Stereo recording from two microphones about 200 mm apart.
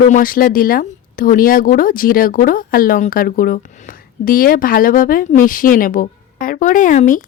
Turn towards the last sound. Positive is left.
turn(degrees=40)  # may be behind; listen again after turning